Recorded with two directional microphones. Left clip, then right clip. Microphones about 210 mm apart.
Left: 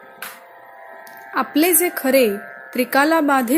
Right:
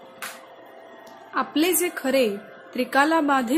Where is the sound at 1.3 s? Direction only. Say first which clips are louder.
Left 5 dB; 25° left (ahead or behind).